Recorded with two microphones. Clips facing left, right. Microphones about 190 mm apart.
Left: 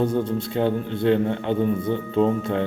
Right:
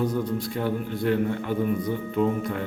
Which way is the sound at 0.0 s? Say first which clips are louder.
Left 3 dB; 25° left (ahead or behind).